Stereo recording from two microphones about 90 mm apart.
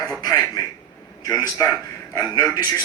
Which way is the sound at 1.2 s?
45° left (ahead or behind).